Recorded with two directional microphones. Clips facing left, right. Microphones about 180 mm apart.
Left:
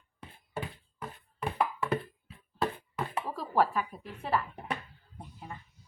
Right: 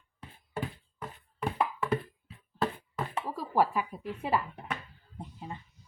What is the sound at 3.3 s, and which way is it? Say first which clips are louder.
A woman's voice: even; 10° right (ahead or behind).